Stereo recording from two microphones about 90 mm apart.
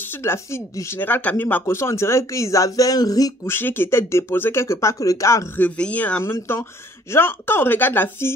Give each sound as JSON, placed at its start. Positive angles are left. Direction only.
{"t": 0.1, "sound": "speech", "side_deg": 30}
{"t": 3.4, "sound": "speech", "side_deg": 25}
{"t": 5.6, "sound": "speech", "side_deg": 15}
{"t": 6.2, "sound": "speech", "side_deg": 30}